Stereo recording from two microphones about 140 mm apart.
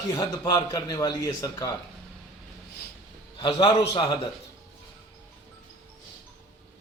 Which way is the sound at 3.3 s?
35° left (ahead or behind).